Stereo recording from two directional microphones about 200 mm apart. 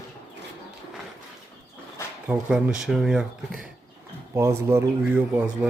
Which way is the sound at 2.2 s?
5° right (ahead or behind).